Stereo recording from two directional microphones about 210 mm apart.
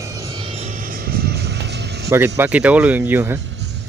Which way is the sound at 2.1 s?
15° right (ahead or behind).